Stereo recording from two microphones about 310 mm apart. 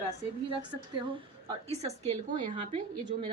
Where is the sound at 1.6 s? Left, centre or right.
Right.